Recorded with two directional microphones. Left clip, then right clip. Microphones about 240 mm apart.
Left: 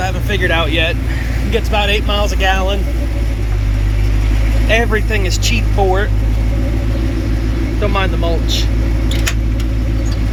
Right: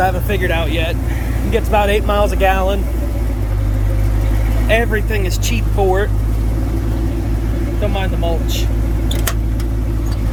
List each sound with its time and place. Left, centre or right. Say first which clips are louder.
0.0 s speech: right 1 dB; centre
4.7 s speech: left 1 dB; centre
7.8 s speech: left 4 dB; centre